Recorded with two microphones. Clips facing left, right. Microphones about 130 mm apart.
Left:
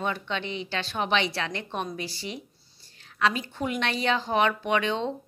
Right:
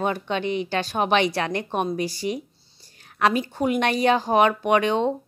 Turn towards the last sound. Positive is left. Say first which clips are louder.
# right 6 dB
turn(degrees=-50)  # may be behind; listen again after turning